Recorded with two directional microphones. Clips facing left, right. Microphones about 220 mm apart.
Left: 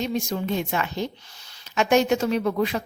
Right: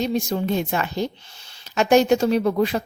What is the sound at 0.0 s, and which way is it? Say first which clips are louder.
A woman's voice: right 3 dB; 35° right (ahead or behind).